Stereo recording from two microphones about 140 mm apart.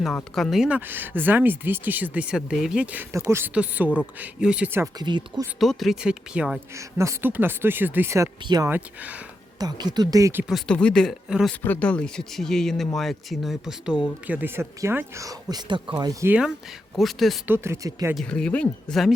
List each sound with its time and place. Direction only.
0.3 s speech: centre (ahead or behind)
4.9 s speech: 30° right (ahead or behind)
5.5 s speech: centre (ahead or behind)
6.7 s speech: 20° right (ahead or behind)
9.6 s speech: 30° right (ahead or behind)
10.5 s speech: 5° left (ahead or behind)
11.6 s speech: 10° left (ahead or behind)
14.3 s speech: 15° right (ahead or behind); by 16.1 s 30° right (ahead or behind)
16.2 s speech: 10° right (ahead or behind)
17.0 s speech: centre (ahead or behind)
17.4 s speech: 15° right (ahead or behind)
18.1 s speech: 5° left (ahead or behind)